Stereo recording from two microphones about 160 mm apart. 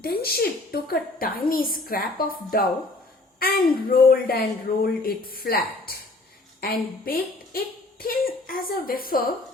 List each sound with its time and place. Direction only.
0.0 s a woman's voice: 70° left (ahead or behind)